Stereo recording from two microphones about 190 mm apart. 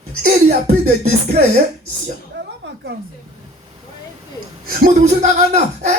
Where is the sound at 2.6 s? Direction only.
65° right (ahead or behind).